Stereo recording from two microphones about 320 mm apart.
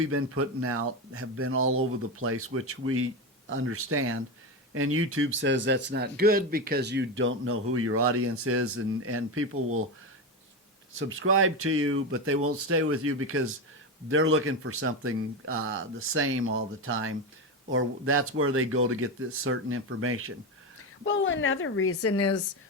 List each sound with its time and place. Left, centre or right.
0.0 s a man's voice: right
10.9 s a man's voice: right
21.0 s a woman's voice: left